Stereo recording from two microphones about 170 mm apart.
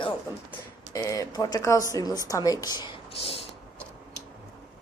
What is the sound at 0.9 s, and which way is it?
Speech, 20° left (ahead or behind).